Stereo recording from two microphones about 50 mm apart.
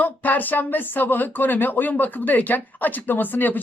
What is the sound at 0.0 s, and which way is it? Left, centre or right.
Speech, left.